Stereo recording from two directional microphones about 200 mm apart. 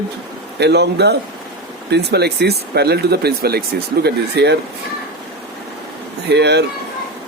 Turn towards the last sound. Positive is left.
turn(degrees=-55)  # may be behind; listen again after turning